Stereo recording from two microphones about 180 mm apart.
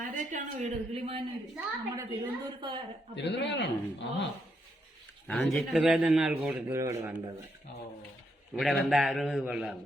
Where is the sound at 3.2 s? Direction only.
75° left (ahead or behind).